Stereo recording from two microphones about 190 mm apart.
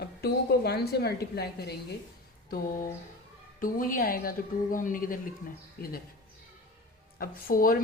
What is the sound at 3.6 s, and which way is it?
A woman's voice, 45° left (ahead or behind).